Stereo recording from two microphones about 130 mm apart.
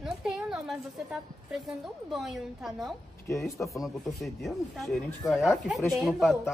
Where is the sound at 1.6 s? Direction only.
Centre (ahead or behind).